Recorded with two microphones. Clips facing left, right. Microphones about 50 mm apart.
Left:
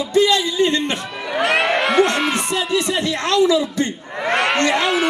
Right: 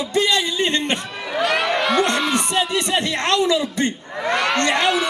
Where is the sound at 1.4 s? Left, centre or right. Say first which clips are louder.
Left 2 dB; left.